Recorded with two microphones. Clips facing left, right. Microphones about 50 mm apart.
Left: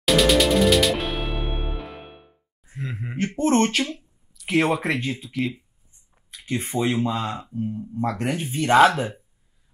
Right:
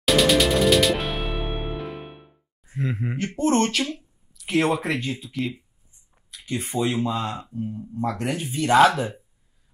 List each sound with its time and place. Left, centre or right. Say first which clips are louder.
0.0 s music: left 1 dB; centre
3.2 s speech: left 2 dB; left
4.4 s speech: left 1 dB; centre
6.1 s a sound: left 1 dB; centre
6.6 s speech: even; left
6.9 s speech: left 1 dB; centre
8.2 s speech: left 1 dB; left
8.8 s speech: left 1 dB; centre